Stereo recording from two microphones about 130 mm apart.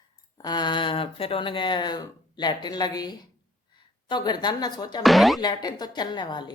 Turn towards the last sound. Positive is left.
turn(degrees=35)  # may be behind; listen again after turning